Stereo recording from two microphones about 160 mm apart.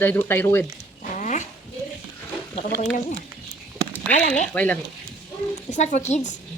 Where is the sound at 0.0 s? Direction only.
10° left (ahead or behind).